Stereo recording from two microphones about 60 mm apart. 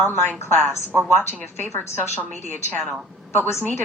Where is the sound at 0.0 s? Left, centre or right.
Left.